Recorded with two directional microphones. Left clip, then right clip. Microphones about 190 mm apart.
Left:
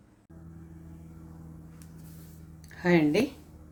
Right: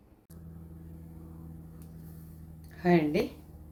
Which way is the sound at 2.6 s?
40° left (ahead or behind).